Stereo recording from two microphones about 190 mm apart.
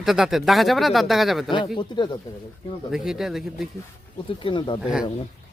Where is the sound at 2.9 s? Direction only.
Centre (ahead or behind).